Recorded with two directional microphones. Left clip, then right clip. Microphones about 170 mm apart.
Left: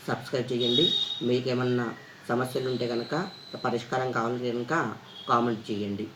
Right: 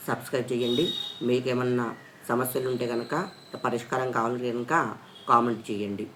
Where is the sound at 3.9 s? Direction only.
10° right (ahead or behind).